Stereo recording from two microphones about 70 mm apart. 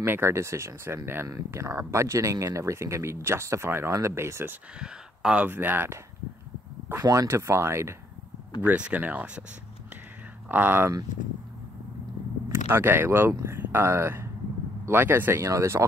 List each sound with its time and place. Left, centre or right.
0.0 s speech: right
4.7 s speech: centre
5.5 s speech: right
7.1 s speech: right
8.5 s speech: right
10.5 s speech: right
12.7 s speech: right
15.4 s speech: right